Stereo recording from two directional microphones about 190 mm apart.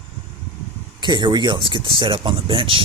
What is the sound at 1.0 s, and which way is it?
Speech, 25° right (ahead or behind).